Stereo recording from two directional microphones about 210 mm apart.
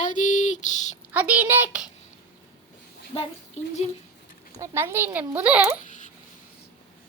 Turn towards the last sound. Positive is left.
turn(degrees=35)  # may be behind; listen again after turning